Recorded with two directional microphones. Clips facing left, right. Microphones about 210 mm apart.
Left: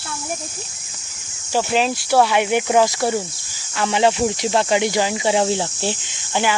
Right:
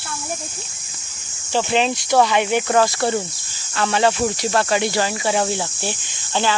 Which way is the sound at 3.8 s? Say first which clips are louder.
Left 1 dB; 15° left (ahead or behind).